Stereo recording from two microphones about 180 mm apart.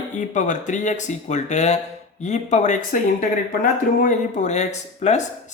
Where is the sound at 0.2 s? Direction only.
45° left (ahead or behind).